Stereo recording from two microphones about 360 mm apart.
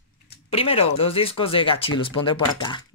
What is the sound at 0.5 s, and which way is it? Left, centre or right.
Speech, centre.